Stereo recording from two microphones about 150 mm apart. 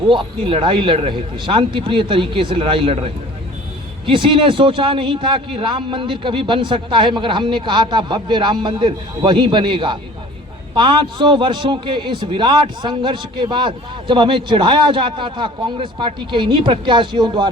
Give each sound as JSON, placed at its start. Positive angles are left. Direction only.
{"t": 0.1, "sound": "a man's voice", "side_deg": -35}